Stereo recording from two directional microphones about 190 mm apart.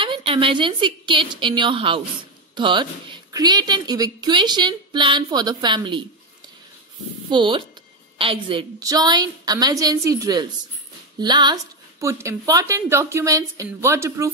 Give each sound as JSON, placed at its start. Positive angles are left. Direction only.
{"t": 0.0, "sound": "a woman's voice", "side_deg": -25}
{"t": 7.2, "sound": "a woman's voice", "side_deg": -25}